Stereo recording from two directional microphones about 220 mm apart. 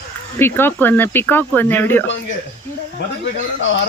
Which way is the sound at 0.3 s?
10° left (ahead or behind).